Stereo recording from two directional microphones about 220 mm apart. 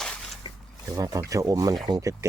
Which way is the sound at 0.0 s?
Centre (ahead or behind).